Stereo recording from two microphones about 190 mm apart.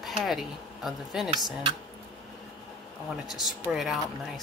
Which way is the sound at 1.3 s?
20° right (ahead or behind).